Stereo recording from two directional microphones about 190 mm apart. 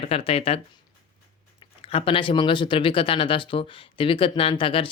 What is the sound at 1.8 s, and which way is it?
Speech, 30° left (ahead or behind).